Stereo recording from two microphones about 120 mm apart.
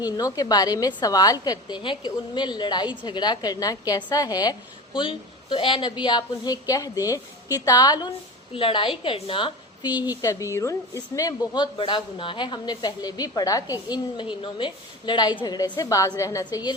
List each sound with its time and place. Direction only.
0.0 s a woman's voice: 30° left (ahead or behind)
4.9 s a woman's voice: 45° left (ahead or behind)
8.5 s a woman's voice: 45° left (ahead or behind)
10.1 s a woman's voice: 30° left (ahead or behind)
13.8 s a woman's voice: 40° left (ahead or behind)